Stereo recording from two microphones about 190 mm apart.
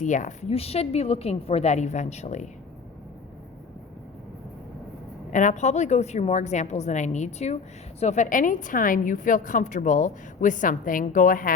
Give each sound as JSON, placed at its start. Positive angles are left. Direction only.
{"t": 0.0, "sound": "a woman's voice", "side_deg": 40}
{"t": 5.3, "sound": "a woman's voice", "side_deg": 40}